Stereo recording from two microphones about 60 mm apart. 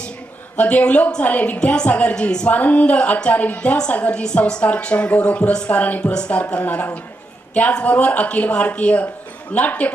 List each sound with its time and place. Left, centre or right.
0.5 s a woman's voice: left